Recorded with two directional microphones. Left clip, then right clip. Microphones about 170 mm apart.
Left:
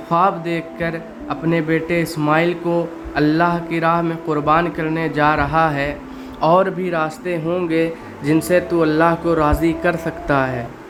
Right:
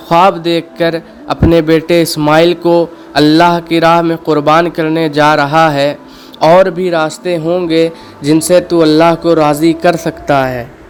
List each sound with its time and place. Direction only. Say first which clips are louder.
0.1 s a man's voice: right 9 dB; 50° right (ahead or behind); by 10.7 s 30° right (ahead or behind)